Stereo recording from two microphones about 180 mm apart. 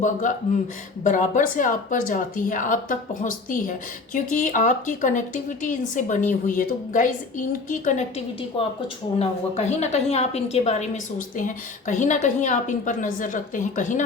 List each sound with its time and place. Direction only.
0.0 s speech: 45° left (ahead or behind)
8.5 s a woman's voice: 30° left (ahead or behind); by 14.0 s 45° left (ahead or behind)